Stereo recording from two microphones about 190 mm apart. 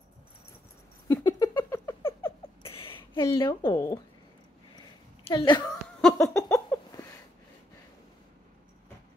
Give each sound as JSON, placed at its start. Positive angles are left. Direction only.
{"t": 1.0, "sound": "rodents", "side_deg": 20}
{"t": 2.6, "sound": "a sound", "side_deg": 30}
{"t": 3.3, "sound": "speech", "side_deg": 25}
{"t": 5.2, "sound": "a woman's voice", "side_deg": 25}
{"t": 5.9, "sound": "laughter", "side_deg": 5}
{"t": 6.3, "sound": "a sound", "side_deg": 15}